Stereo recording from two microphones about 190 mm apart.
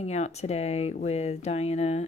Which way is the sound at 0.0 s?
35° left (ahead or behind).